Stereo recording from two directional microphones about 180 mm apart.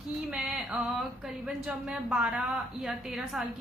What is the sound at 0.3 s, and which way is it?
Speech, centre (ahead or behind).